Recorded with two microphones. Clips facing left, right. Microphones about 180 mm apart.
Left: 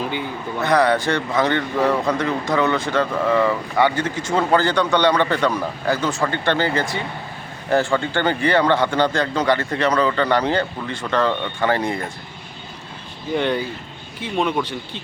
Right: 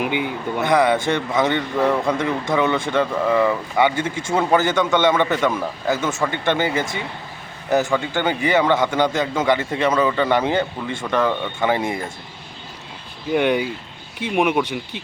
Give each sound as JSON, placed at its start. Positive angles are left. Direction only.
{"t": 0.0, "sound": "speech", "side_deg": -15}
{"t": 1.3, "sound": "speech", "side_deg": -10}
{"t": 2.5, "sound": "speech", "side_deg": -25}
{"t": 7.9, "sound": "speech", "side_deg": -5}
{"t": 13.3, "sound": "speech", "side_deg": -10}